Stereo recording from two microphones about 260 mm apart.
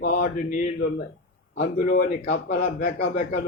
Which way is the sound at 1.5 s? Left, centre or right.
Left.